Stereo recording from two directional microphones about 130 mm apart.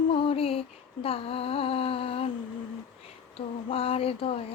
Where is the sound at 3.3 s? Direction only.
45° left (ahead or behind).